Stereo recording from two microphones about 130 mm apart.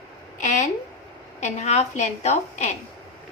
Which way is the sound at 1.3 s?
60° left (ahead or behind).